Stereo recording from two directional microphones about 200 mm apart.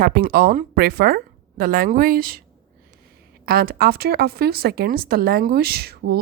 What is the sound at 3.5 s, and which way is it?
Speech, 50° right (ahead or behind).